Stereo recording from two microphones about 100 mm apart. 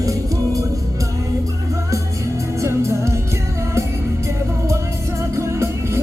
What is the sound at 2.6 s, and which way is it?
Music, 30° right (ahead or behind).